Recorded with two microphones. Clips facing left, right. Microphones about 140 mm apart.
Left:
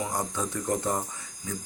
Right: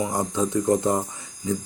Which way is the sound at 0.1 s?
25° right (ahead or behind).